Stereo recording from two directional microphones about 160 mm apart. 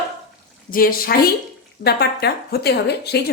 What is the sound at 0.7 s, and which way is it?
Speech, 65° left (ahead or behind).